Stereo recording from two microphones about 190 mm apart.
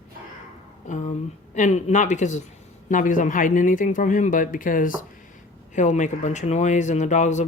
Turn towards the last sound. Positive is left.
turn(degrees=40)  # may be behind; listen again after turning